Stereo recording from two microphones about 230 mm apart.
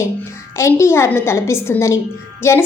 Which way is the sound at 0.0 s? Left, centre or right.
Centre.